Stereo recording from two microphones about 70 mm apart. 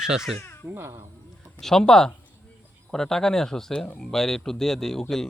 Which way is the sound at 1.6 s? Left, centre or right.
Centre.